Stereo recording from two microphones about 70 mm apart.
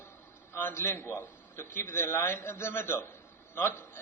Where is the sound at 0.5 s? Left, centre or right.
Left.